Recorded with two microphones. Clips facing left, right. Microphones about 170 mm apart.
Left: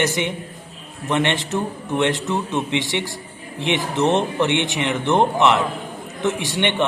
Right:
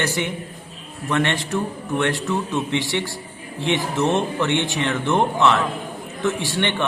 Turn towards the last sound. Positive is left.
turn(degrees=20)  # may be behind; listen again after turning